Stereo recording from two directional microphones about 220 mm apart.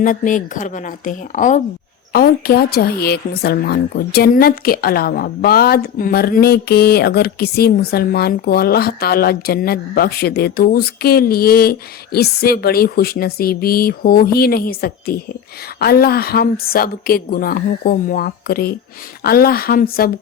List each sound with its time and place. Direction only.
0.0 s a woman's voice: 35° left (ahead or behind)